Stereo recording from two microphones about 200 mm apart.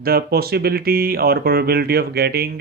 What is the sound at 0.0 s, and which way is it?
Speech, 50° right (ahead or behind).